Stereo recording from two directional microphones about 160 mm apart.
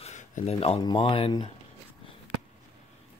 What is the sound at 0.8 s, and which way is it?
Speech, 35° left (ahead or behind).